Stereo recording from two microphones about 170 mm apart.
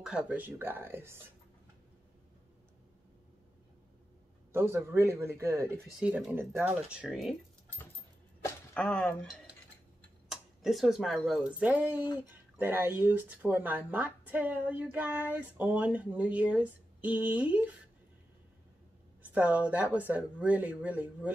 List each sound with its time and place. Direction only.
0.0 s speech: 5° right (ahead or behind)
4.5 s speech: 15° right (ahead or behind)
5.9 s speech: 5° right (ahead or behind)
8.5 s speech: 5° left (ahead or behind)
10.3 s speech: centre (ahead or behind)
19.3 s speech: 10° right (ahead or behind)